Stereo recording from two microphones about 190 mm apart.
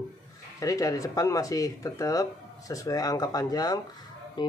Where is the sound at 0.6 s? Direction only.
15° left (ahead or behind).